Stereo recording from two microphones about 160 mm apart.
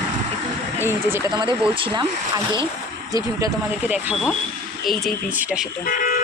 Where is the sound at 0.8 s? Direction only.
15° right (ahead or behind).